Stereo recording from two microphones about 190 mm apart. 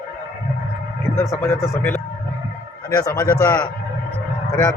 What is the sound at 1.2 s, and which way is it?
A man's voice, 15° left (ahead or behind).